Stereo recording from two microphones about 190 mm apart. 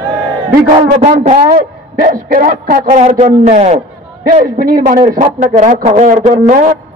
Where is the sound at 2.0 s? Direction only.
50° right (ahead or behind).